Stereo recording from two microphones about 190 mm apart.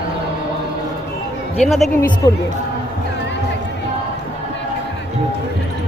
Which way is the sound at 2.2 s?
20° left (ahead or behind).